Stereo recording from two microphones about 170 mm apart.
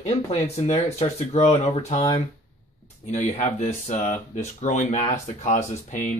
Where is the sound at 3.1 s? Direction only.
45° left (ahead or behind).